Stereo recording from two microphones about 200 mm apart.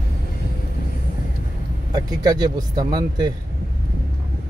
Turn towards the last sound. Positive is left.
turn(degrees=-20)  # may be behind; listen again after turning